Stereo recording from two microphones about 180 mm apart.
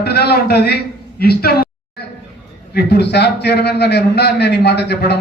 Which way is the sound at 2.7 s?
65° left (ahead or behind).